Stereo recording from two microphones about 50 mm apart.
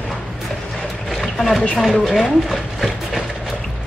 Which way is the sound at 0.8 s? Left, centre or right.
Centre.